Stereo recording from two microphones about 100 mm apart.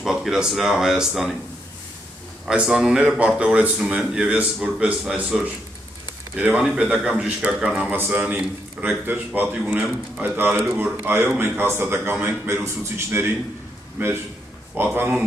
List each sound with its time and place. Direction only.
0.0 s speech: 5° right (ahead or behind)
2.4 s speech: 5° right (ahead or behind)
6.3 s speech: 10° right (ahead or behind)
7.9 s a man's voice: 20° right (ahead or behind)